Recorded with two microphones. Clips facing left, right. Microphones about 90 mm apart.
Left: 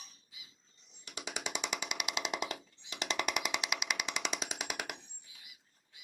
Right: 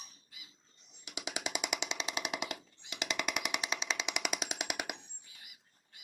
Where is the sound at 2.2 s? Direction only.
15° right (ahead or behind).